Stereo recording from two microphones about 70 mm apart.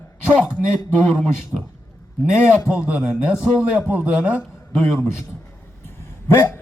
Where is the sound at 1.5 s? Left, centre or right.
Centre.